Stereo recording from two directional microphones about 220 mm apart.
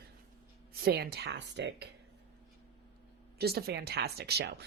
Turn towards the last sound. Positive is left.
turn(degrees=-50)  # may be behind; listen again after turning